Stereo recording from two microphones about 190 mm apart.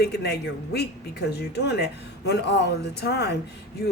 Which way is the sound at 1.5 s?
60° left (ahead or behind).